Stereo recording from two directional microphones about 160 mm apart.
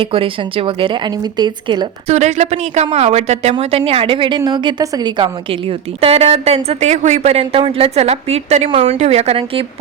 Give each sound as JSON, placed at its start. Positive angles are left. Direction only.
{"t": 0.0, "sound": "a woman's voice", "side_deg": -35}
{"t": 2.0, "sound": "a woman's voice", "side_deg": -45}